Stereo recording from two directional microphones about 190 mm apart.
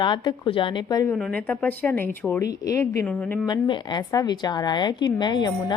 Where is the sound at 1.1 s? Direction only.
5° left (ahead or behind).